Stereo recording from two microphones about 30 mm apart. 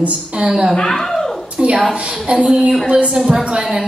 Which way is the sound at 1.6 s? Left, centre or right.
Right.